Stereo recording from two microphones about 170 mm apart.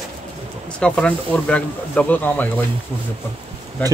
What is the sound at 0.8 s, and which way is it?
Speech, 5° left (ahead or behind).